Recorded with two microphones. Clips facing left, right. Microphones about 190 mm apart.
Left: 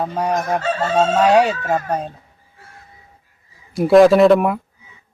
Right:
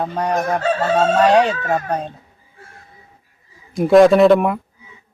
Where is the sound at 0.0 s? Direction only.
5° left (ahead or behind).